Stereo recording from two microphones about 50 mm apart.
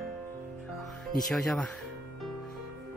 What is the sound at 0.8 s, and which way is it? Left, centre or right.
Music, centre.